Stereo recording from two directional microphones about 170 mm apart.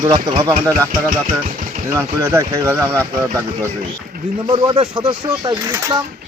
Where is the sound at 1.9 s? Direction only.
15° right (ahead or behind).